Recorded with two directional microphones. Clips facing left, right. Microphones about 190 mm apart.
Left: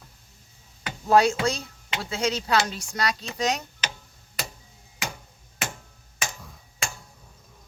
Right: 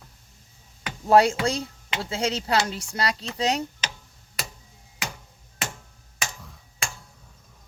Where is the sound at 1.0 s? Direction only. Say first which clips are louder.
Right 1 dB; 30° right (ahead or behind).